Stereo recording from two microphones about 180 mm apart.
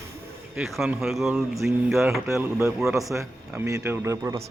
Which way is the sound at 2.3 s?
15° right (ahead or behind).